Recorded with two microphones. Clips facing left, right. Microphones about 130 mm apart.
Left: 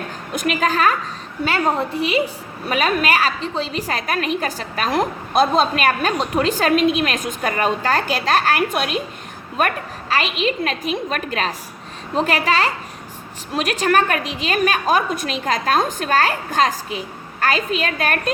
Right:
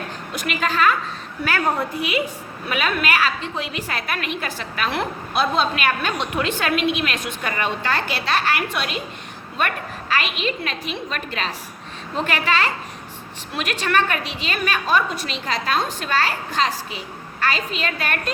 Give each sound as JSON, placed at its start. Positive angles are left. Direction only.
{"t": 0.3, "sound": "a woman's voice", "side_deg": 45}
{"t": 1.5, "sound": "a woman's voice", "side_deg": 25}